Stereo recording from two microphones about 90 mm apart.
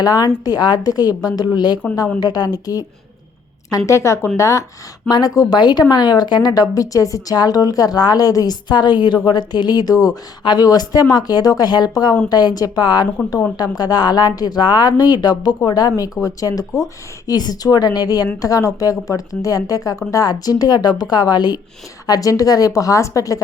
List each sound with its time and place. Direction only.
0.0 s a woman's voice: 45° left (ahead or behind)
5.0 s a woman's voice: 45° left (ahead or behind)